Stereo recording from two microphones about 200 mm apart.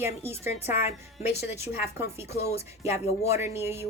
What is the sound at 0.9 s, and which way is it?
Speech, 30° left (ahead or behind).